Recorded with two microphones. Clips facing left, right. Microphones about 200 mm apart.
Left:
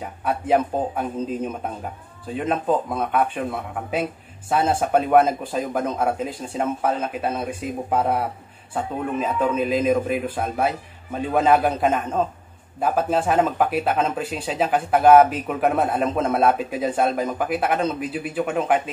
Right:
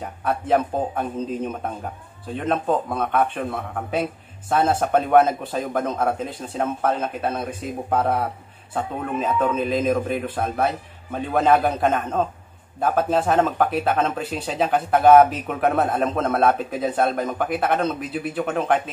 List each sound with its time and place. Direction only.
0.2 s speech: 5° left (ahead or behind)
4.5 s speech: 5° left (ahead or behind)